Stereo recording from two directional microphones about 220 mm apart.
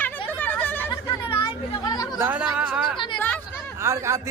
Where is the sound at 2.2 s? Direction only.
5° right (ahead or behind).